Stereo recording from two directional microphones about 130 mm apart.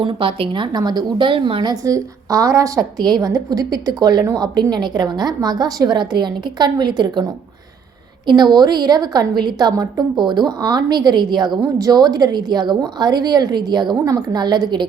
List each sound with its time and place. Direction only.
0.0 s a woman's voice: 40° right (ahead or behind)
1.7 s a woman's voice: 25° right (ahead or behind)
8.3 s a woman's voice: 35° right (ahead or behind)